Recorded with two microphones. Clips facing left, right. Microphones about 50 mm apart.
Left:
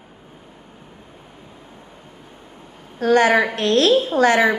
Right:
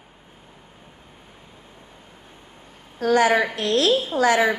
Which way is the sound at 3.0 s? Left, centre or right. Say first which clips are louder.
Left 3 dB; left.